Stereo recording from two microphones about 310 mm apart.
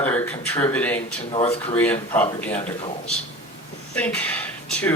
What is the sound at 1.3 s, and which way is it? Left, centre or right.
Speech, centre.